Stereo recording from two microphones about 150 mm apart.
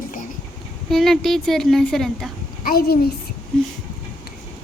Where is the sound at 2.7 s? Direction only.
90° left.